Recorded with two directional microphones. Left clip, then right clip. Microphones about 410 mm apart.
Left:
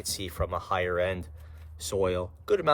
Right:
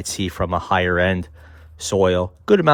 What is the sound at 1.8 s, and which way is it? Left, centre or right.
Speech, centre.